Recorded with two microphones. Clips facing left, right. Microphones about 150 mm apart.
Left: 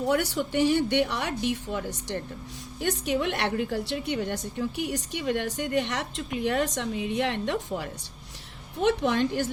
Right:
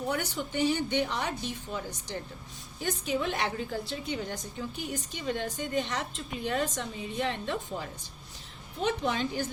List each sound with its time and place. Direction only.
0.1 s a woman's voice: 85° left